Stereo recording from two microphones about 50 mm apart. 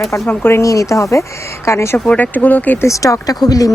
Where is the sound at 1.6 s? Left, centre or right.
Left.